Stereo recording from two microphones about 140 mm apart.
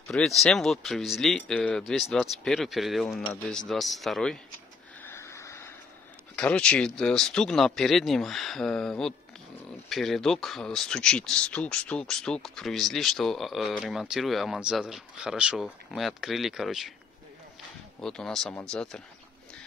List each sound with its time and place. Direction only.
0.1 s speech: 5° left (ahead or behind)
5.0 s a sound: 20° left (ahead or behind)
6.3 s speech: 10° left (ahead or behind)
18.0 s speech: 5° left (ahead or behind)